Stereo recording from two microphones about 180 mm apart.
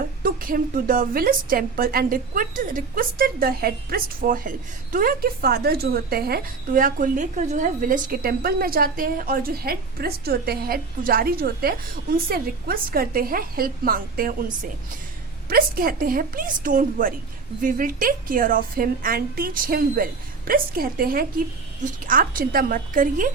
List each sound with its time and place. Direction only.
0.0 s a woman's voice: 50° right (ahead or behind)